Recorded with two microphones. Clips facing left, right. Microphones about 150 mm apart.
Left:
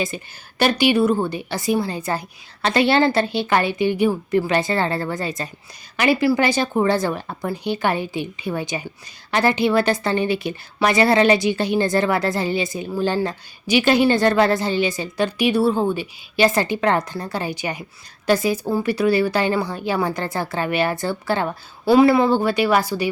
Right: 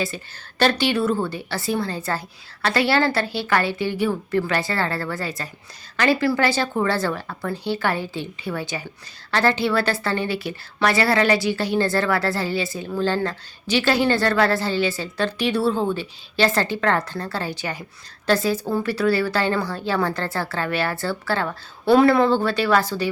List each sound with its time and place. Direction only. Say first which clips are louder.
0.1 s a woman's voice: left 1 dB; 15° left (ahead or behind)
21.8 s a woman's voice: left 1 dB; 5° left (ahead or behind)